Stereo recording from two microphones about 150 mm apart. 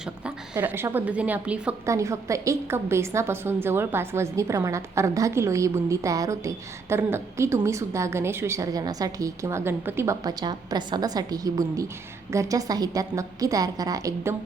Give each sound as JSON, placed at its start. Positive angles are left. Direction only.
{"t": 0.6, "sound": "a woman's voice", "side_deg": -15}
{"t": 1.9, "sound": "a woman's voice", "side_deg": -20}